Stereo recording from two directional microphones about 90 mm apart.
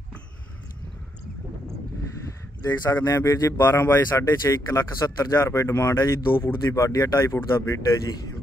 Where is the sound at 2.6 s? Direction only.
45° left (ahead or behind); by 6.5 s 25° left (ahead or behind).